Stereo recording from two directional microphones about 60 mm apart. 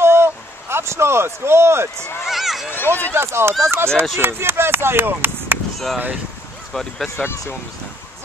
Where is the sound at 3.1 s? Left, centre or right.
Right.